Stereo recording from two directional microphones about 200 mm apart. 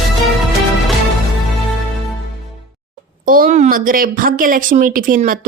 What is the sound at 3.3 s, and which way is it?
A woman's voice, 40° right (ahead or behind).